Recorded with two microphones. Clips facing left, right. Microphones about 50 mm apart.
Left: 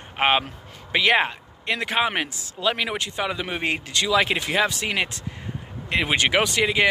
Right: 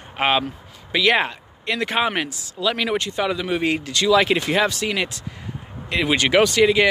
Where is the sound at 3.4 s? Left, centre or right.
Left; by 4.7 s centre.